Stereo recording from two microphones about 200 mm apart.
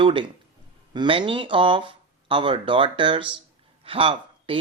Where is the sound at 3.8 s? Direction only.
25° right (ahead or behind).